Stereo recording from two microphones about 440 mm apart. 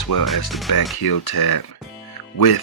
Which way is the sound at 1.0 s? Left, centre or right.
Left.